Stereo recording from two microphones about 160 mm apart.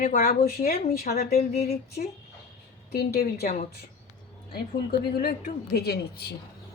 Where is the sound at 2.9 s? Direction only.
75° left (ahead or behind).